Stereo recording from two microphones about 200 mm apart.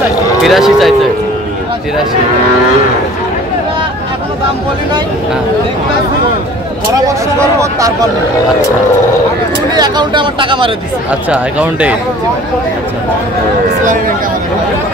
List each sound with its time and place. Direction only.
0.5 s speech: centre (ahead or behind)
9.8 s speech: 20° right (ahead or behind)
11.1 s speech: 5° right (ahead or behind)